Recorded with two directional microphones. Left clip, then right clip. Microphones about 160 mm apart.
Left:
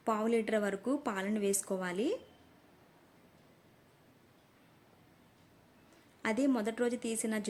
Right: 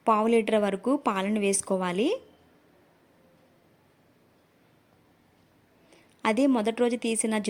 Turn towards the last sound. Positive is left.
turn(degrees=-35)  # may be behind; listen again after turning